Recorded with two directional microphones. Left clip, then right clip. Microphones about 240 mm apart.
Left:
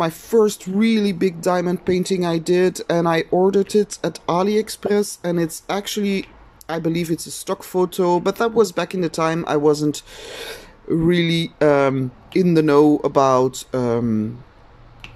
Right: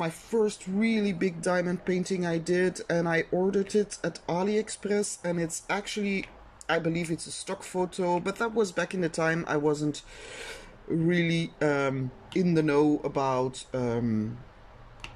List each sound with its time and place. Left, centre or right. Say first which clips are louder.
0.0 s speech: left 11 dB; left